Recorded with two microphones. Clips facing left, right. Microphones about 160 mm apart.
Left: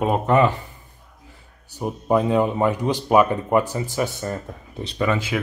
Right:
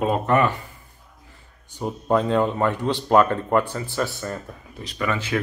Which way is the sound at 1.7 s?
10° left (ahead or behind).